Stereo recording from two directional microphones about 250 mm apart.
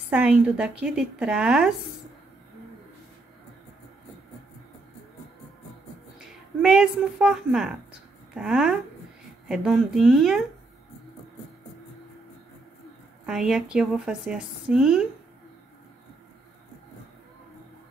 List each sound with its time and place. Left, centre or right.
0.1 s a woman's voice: centre
6.1 s a woman's voice: centre
13.2 s a woman's voice: centre